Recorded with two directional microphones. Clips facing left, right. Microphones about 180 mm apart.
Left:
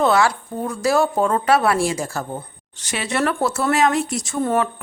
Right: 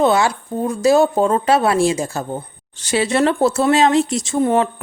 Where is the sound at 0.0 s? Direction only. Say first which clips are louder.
Right 2 dB; 20° right (ahead or behind).